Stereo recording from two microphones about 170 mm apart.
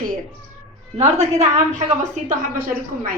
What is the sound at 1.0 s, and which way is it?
Speech, 40° right (ahead or behind).